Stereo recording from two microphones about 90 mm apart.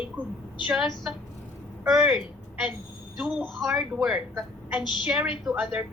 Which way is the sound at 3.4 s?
Centre (ahead or behind).